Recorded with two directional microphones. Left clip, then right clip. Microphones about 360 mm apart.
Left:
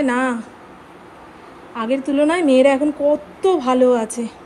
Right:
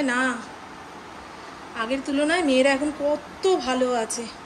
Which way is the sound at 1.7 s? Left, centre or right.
Centre.